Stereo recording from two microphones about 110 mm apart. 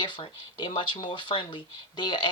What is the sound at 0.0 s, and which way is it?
Speech, 50° left (ahead or behind).